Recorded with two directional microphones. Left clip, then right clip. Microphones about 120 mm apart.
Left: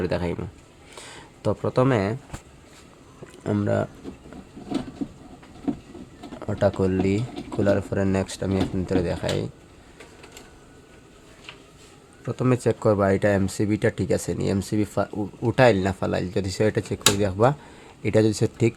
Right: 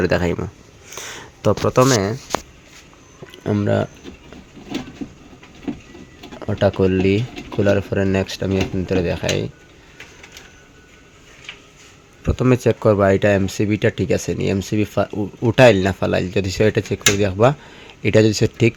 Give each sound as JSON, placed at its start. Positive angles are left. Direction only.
{"t": 0.0, "sound": "speech", "side_deg": -35}
{"t": 0.9, "sound": "a sound", "side_deg": -35}
{"t": 3.3, "sound": "speech", "side_deg": -30}
{"t": 6.5, "sound": "speech", "side_deg": -35}
{"t": 12.2, "sound": "speech", "side_deg": -40}